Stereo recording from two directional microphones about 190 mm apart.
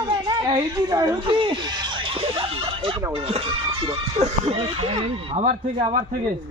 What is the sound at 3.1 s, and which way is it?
Music, 30° right (ahead or behind).